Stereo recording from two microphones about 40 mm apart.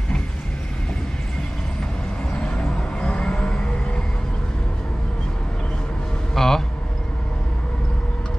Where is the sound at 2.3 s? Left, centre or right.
Left.